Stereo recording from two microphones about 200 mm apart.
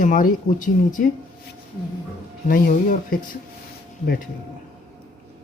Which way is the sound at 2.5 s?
45° left (ahead or behind).